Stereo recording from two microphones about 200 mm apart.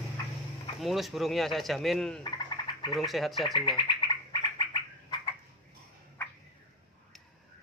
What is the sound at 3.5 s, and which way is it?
Bird, 25° left (ahead or behind).